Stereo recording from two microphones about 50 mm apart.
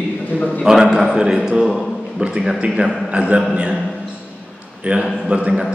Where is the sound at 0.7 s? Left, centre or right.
Centre.